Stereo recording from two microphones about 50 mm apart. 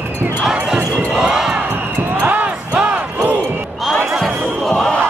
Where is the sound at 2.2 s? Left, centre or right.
Right.